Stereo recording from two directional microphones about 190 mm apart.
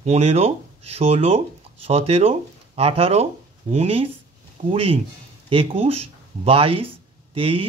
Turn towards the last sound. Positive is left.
turn(degrees=-30)  # may be behind; listen again after turning